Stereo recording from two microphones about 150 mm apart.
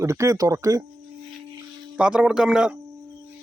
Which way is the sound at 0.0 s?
20° right (ahead or behind).